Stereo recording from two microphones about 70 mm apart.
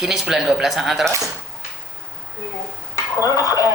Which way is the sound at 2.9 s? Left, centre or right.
Left.